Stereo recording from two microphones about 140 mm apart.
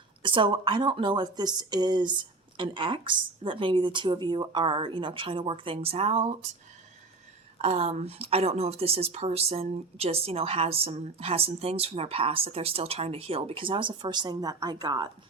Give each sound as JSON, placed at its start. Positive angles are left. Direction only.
{"t": 0.2, "sound": "speech", "side_deg": -35}
{"t": 7.6, "sound": "a woman's voice", "side_deg": -50}